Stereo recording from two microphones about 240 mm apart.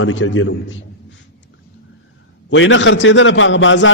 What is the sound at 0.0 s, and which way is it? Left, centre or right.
Speech, left.